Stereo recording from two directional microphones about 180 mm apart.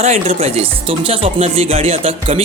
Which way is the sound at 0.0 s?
35° right (ahead or behind).